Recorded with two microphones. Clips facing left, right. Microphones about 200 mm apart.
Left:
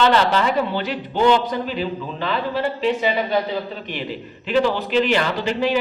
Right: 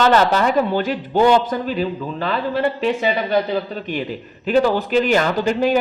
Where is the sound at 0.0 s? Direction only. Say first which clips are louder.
Right 2 dB; 45° right (ahead or behind).